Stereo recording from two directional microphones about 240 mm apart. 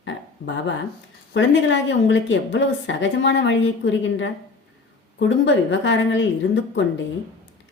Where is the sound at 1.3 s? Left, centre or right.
Left.